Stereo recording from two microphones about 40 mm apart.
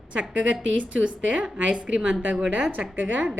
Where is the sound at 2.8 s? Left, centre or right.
Right.